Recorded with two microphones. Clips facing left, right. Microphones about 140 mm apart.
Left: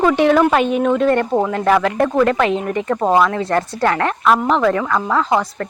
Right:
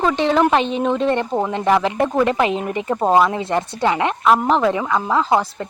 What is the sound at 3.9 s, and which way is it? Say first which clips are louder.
Speech: even; 10° right (ahead or behind).